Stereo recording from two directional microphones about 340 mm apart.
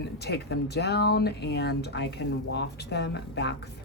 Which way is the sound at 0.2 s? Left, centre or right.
Left.